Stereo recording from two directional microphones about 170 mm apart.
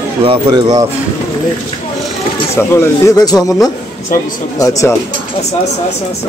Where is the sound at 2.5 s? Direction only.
15° left (ahead or behind).